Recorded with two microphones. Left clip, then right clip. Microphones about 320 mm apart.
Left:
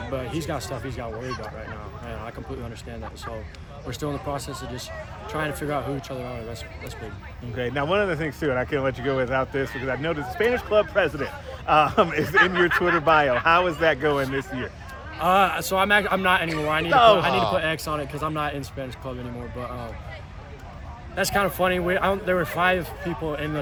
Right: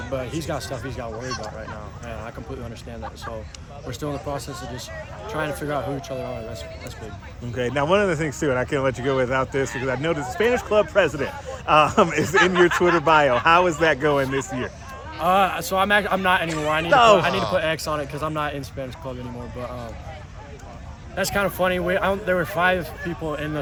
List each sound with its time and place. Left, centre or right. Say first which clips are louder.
0.0 s music: right 2 dB; centre
0.3 s speech: right 1 dB; centre
3.8 s speech: right 1 dB; centre
7.5 s speech: right 3 dB; right
15.2 s speech: right 1 dB; centre
16.9 s speech: right 1 dB; right
17.2 s speech: even; centre
21.2 s speech: even; centre